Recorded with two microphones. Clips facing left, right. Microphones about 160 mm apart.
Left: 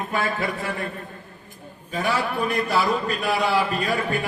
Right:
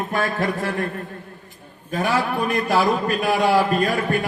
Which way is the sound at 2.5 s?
45° right (ahead or behind).